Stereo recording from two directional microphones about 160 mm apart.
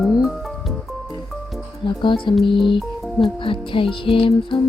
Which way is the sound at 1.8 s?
30° left (ahead or behind).